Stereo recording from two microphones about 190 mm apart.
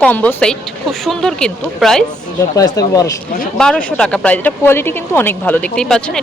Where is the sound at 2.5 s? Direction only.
20° left (ahead or behind).